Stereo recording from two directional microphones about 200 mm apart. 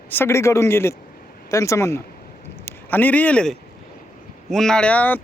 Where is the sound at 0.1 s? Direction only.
10° left (ahead or behind).